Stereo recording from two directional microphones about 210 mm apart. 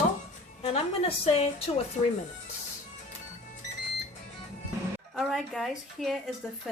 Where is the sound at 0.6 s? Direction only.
30° left (ahead or behind).